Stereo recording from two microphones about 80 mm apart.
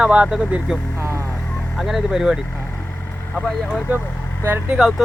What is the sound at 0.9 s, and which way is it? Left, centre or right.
Vehicle, right.